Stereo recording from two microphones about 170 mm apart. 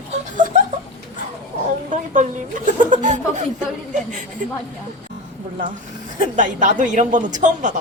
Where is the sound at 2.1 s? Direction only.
50° right (ahead or behind).